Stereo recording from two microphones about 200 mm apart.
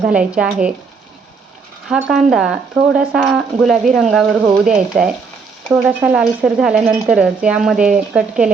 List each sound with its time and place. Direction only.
0.0 s speech: 5° right (ahead or behind)
1.9 s speech: centre (ahead or behind)